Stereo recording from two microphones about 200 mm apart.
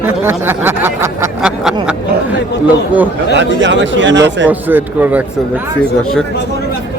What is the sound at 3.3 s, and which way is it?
Speech, 65° right (ahead or behind).